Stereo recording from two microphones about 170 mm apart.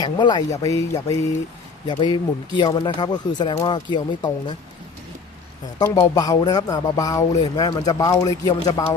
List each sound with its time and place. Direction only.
0.0 s speech: 25° left (ahead or behind)
5.8 s speech: 20° left (ahead or behind)